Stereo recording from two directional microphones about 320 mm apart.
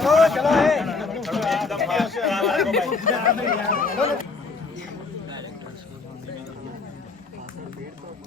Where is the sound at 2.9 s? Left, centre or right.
Left.